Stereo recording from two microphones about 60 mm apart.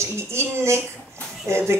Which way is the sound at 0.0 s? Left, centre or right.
Right.